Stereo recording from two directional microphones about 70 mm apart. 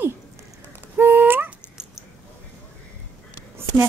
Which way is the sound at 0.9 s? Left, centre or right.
Right.